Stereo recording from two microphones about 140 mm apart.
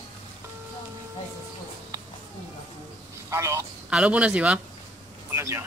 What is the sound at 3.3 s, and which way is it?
Speech, 20° right (ahead or behind).